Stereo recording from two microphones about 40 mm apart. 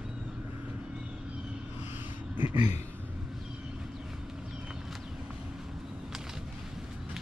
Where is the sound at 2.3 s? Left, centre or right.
Right.